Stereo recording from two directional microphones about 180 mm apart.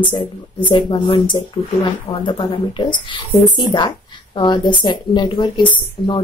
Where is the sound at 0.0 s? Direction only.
25° left (ahead or behind).